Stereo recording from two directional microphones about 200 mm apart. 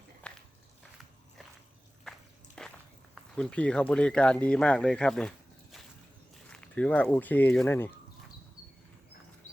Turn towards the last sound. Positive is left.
turn(degrees=10)  # may be behind; listen again after turning